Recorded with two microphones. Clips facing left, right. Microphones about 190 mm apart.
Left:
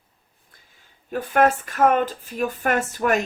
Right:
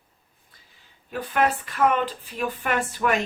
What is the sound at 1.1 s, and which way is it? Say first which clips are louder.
Speech: left 5 dB; 45° left (ahead or behind).